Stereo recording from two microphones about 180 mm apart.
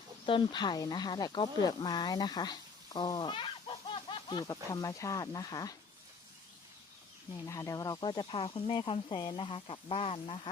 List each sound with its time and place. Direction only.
0.3 s speech: 25° left (ahead or behind)
7.4 s speech: 15° left (ahead or behind)